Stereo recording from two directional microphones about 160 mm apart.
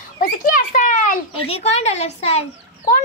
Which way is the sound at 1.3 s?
40° left (ahead or behind).